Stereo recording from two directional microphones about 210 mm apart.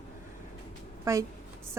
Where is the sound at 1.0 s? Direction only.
15° right (ahead or behind).